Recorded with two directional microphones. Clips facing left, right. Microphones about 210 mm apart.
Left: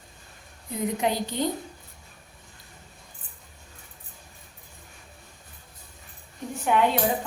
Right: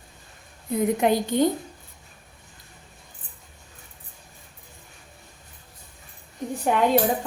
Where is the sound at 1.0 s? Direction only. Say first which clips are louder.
Right 6 dB; 50° right (ahead or behind).